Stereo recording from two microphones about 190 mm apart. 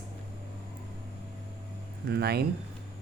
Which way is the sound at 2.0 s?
55° right (ahead or behind).